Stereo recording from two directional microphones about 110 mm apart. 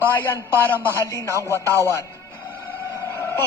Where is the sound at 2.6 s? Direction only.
20° left (ahead or behind).